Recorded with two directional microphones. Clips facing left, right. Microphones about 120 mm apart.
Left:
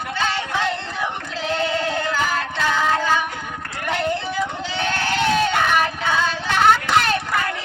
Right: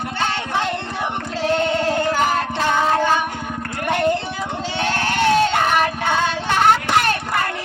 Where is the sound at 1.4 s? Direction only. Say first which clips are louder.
Right 4 dB; 50° right (ahead or behind).